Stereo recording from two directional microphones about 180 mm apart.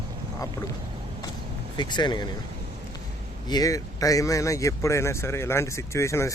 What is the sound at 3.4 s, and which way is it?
Speech, 20° left (ahead or behind).